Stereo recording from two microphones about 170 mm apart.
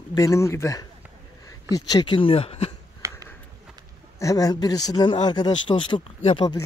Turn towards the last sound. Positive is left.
turn(degrees=30)  # may be behind; listen again after turning